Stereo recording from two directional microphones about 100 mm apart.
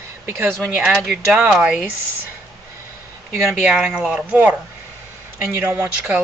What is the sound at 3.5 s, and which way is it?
Speech, 15° right (ahead or behind).